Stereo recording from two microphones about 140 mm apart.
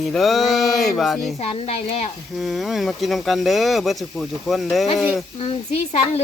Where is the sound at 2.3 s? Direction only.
Centre (ahead or behind).